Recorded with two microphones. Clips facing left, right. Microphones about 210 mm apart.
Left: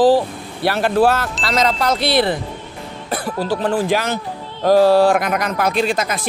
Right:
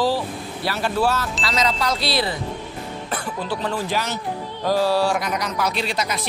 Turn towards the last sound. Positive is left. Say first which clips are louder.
# left 6 dB
turn(degrees=50)  # may be behind; listen again after turning